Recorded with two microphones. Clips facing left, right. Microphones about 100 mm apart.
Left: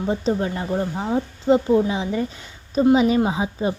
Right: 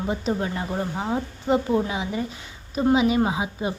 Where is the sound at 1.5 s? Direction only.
20° right (ahead or behind).